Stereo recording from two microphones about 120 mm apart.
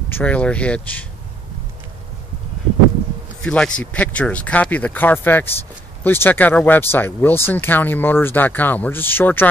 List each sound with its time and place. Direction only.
0.1 s speech: 10° left (ahead or behind)
3.4 s speech: 10° left (ahead or behind)